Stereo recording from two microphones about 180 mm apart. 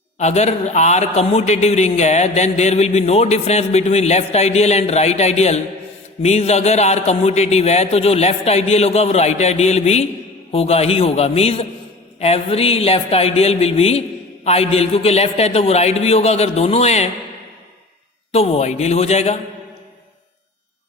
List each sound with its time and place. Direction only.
0.2 s a man's voice: 40° left (ahead or behind)
18.3 s a man's voice: 35° left (ahead or behind)